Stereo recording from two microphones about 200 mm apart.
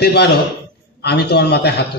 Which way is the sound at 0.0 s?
55° left (ahead or behind).